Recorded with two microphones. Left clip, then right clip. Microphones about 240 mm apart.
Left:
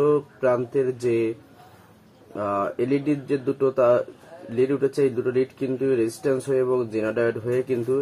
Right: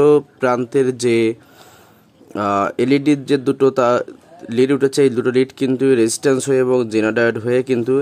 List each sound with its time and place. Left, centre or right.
0.0 s speech: right
2.3 s speech: right